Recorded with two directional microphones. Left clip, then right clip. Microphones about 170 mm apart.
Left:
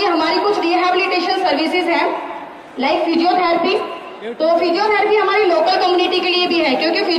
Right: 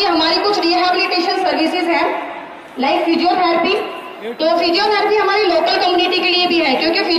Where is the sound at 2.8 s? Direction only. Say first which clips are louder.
Right 1 dB; 45° right (ahead or behind).